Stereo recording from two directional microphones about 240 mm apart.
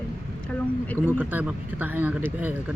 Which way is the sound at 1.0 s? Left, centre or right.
Centre.